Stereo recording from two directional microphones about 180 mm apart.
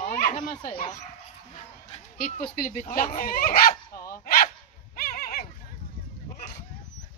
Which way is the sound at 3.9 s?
20° left (ahead or behind).